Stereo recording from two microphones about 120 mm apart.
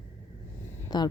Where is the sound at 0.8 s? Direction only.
35° left (ahead or behind).